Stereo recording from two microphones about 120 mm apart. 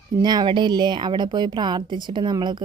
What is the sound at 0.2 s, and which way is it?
A woman's voice, 35° right (ahead or behind).